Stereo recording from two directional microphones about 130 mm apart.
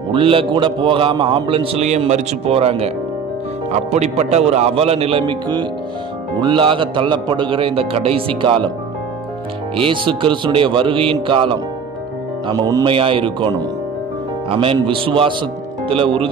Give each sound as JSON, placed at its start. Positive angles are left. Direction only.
{"t": 0.1, "sound": "a man's voice", "side_deg": -45}
{"t": 3.9, "sound": "a man's voice", "side_deg": -60}
{"t": 9.8, "sound": "a man's voice", "side_deg": -40}
{"t": 12.5, "sound": "speech", "side_deg": -25}
{"t": 12.8, "sound": "a man's voice", "side_deg": -45}